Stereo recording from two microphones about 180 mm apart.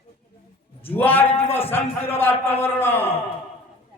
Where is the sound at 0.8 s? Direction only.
10° left (ahead or behind).